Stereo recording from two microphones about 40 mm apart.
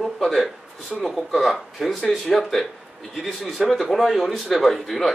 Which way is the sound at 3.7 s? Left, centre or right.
Centre.